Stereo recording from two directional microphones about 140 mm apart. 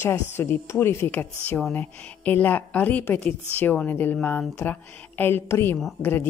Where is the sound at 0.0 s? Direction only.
15° left (ahead or behind).